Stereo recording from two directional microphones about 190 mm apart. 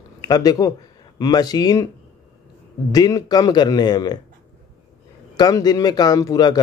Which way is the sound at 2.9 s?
20° left (ahead or behind).